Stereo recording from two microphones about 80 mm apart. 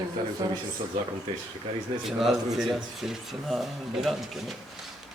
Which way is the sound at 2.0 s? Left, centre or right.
Centre.